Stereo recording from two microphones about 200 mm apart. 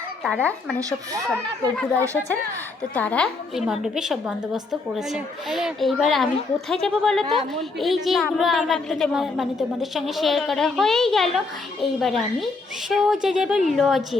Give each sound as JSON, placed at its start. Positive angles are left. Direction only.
{"t": 0.8, "sound": "speech", "side_deg": -15}
{"t": 1.3, "sound": "a woman's voice", "side_deg": 5}